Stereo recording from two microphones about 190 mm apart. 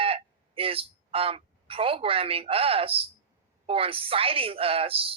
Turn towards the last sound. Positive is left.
turn(degrees=-30)  # may be behind; listen again after turning